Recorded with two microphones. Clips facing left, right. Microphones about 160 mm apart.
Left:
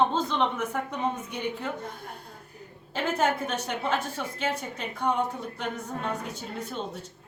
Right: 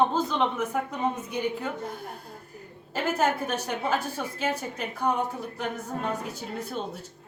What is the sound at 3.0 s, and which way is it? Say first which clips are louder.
A woman's voice: right 1 dB; 10° right (ahead or behind).